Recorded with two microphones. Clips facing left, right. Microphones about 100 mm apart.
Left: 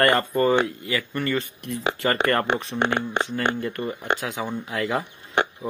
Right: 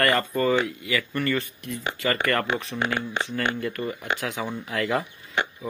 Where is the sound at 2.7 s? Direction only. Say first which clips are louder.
Left 3 dB; 65° left (ahead or behind).